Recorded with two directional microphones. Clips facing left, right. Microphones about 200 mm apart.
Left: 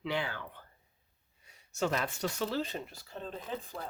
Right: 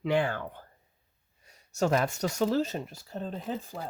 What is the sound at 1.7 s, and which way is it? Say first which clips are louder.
Speech: right 6 dB; 45° right (ahead or behind).